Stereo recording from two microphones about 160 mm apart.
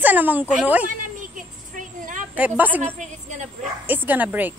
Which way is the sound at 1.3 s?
55° right (ahead or behind).